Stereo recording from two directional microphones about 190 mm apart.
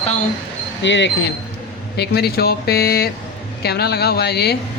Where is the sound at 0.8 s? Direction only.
70° left (ahead or behind).